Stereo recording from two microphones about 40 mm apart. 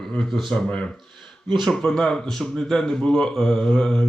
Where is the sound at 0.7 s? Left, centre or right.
Left.